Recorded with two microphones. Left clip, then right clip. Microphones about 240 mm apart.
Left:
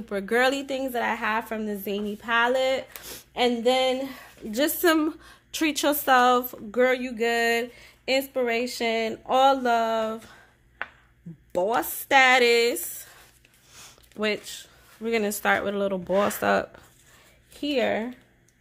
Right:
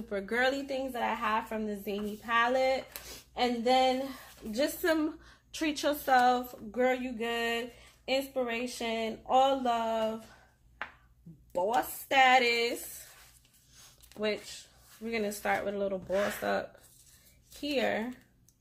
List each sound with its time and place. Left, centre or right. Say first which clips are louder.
0.1 s a woman's voice: left 7 dB; left
11.5 s speech: left 5 dB; left
13.7 s a sound: left 7 dB; left
15.0 s a woman's voice: left 8 dB; left